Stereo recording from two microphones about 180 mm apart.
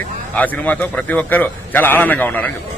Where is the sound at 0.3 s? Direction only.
10° left (ahead or behind).